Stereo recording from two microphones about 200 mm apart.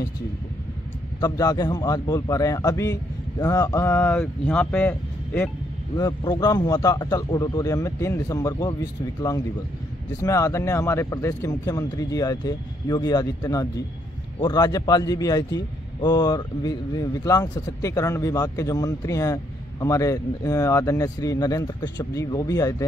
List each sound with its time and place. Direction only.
1.2 s a man's voice: 20° left (ahead or behind)
5.9 s a man's voice: 20° left (ahead or behind)
10.2 s a man's voice: 15° left (ahead or behind)